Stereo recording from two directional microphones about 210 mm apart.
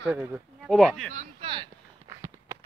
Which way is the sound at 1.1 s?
30° right (ahead or behind).